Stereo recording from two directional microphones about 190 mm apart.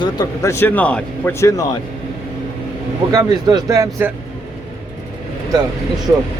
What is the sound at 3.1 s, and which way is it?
Speech, 20° right (ahead or behind).